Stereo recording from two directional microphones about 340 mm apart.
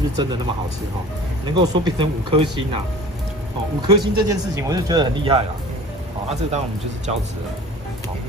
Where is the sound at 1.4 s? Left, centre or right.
Centre.